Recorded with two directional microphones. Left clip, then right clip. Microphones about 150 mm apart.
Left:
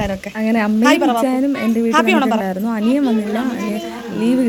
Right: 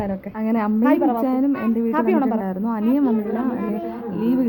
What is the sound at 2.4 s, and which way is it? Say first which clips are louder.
Speech: left 4 dB; 25° left (ahead or behind).